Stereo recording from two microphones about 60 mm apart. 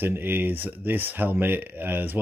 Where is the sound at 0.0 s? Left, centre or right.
Right.